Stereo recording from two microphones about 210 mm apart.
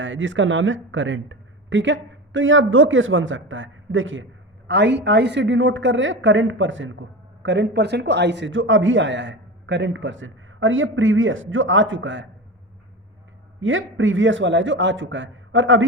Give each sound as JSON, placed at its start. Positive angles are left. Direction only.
{"t": 0.0, "sound": "speech", "side_deg": -65}
{"t": 13.6, "sound": "speech", "side_deg": -65}